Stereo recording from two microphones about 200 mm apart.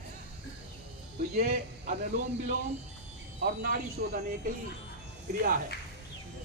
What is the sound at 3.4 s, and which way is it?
Speech, 45° right (ahead or behind).